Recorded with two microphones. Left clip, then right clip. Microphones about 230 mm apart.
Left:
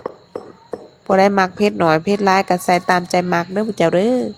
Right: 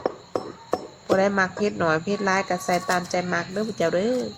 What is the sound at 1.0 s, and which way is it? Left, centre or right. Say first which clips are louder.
A woman's voice: left 8 dB; left.